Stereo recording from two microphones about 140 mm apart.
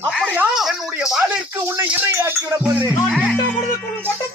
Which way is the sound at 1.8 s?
15° right (ahead or behind).